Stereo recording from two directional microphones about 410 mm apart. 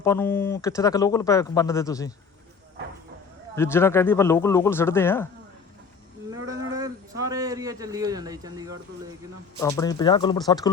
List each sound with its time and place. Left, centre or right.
0.0 s speech: centre
3.5 s speech: centre
6.7 s a man's voice: centre
9.6 s speech: centre